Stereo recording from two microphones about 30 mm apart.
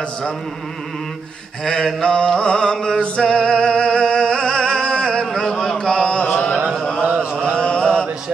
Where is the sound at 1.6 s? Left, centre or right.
Centre.